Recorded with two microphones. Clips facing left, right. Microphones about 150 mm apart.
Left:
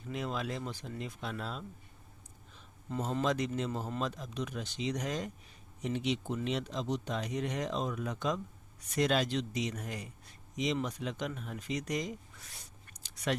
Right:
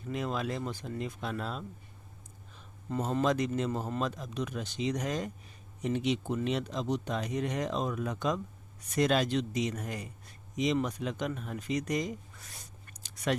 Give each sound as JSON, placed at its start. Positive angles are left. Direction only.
{"t": 0.1, "sound": "speech", "side_deg": -50}
{"t": 2.9, "sound": "speech", "side_deg": -50}